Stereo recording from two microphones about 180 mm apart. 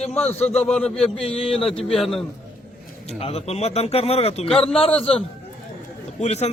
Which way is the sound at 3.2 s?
35° left (ahead or behind).